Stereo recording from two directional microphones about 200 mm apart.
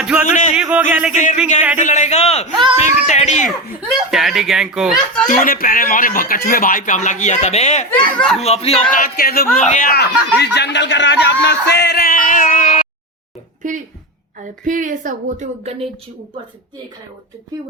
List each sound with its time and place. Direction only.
0.0 s music: 5° right (ahead or behind)
0.5 s speech: 5° right (ahead or behind)
1.1 s a man's voice: 40° left (ahead or behind)
1.8 s a sound: 35° left (ahead or behind)
3.8 s chuckle: centre (ahead or behind)
5.5 s a man's voice: 45° left (ahead or behind)
7.9 s speech: 5° left (ahead or behind)
8.4 s a man's voice: 30° left (ahead or behind)
8.9 s a man's voice: 45° left (ahead or behind)
13.6 s a woman's voice: 40° right (ahead or behind)